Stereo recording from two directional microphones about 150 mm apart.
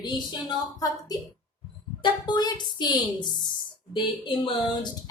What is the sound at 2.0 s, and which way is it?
Speech, 30° left (ahead or behind).